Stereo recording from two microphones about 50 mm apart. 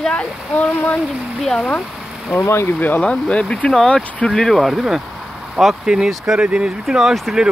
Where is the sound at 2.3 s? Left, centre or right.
Left.